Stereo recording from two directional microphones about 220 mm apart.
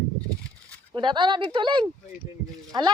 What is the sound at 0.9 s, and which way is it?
A woman's voice, 20° right (ahead or behind).